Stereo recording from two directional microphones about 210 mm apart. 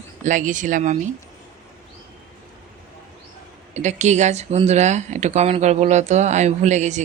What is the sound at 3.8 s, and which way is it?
Speech, 35° right (ahead or behind).